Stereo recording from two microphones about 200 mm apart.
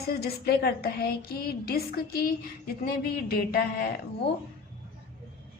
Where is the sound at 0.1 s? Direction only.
50° left (ahead or behind).